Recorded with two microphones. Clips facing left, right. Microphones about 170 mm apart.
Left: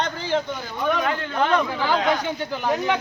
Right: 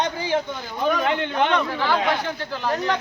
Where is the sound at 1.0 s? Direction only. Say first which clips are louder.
Right 2 dB; 25° right (ahead or behind).